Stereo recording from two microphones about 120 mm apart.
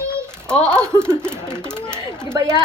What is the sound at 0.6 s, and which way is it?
Speech, 20° right (ahead or behind).